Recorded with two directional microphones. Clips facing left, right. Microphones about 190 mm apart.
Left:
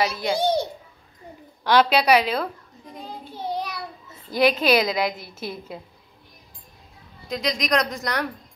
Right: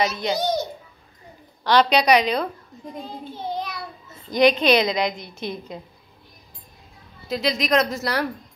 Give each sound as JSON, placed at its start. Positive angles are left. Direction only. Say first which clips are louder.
{"t": 0.0, "sound": "a child's voice", "louder": "even", "side_deg": 10}
{"t": 0.4, "sound": "a child's voice", "louder": "left 3 dB", "side_deg": 30}
{"t": 1.6, "sound": "a woman's voice", "louder": "right 1 dB", "side_deg": 10}
{"t": 4.3, "sound": "a woman's voice", "louder": "right 2 dB", "side_deg": 5}
{"t": 7.2, "sound": "a woman's voice", "louder": "right 2 dB", "side_deg": -5}